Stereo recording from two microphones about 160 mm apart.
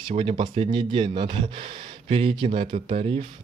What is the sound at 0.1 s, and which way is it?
Speech, 35° right (ahead or behind).